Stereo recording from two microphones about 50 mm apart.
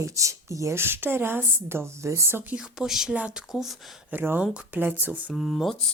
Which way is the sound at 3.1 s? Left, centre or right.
Right.